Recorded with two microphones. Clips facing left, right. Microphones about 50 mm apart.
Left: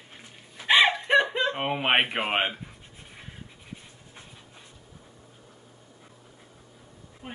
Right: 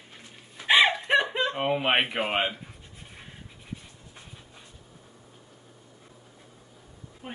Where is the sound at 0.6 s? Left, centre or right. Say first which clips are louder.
Even; centre.